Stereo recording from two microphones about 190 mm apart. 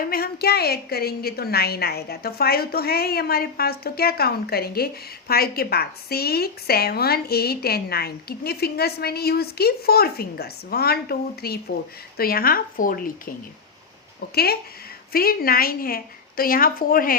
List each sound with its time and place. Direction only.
0.0 s a woman's voice: 50° left (ahead or behind)
14.3 s a woman's voice: 55° left (ahead or behind)